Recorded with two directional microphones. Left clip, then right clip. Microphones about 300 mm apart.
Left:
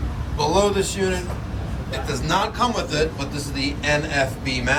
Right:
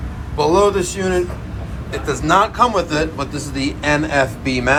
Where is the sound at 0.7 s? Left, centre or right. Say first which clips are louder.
Right 4 dB; centre.